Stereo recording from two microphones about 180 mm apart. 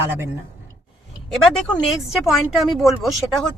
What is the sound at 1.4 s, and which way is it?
Speech, 5° left (ahead or behind).